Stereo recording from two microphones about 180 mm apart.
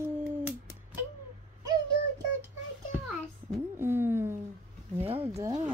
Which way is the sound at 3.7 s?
15° right (ahead or behind).